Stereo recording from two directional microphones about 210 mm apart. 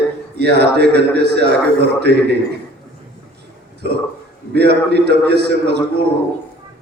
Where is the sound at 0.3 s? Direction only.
50° right (ahead or behind).